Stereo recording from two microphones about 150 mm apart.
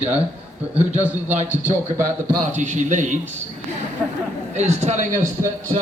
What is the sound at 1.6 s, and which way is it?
A man's voice, 55° right (ahead or behind).